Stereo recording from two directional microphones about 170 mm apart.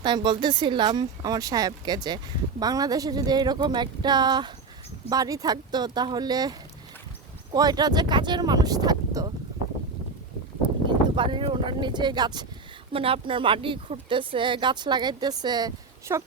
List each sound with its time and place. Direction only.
0.0 s speech: 25° right (ahead or behind)
10.8 s speech: 30° right (ahead or behind)